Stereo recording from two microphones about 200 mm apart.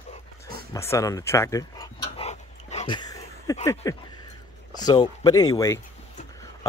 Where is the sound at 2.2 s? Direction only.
35° left (ahead or behind).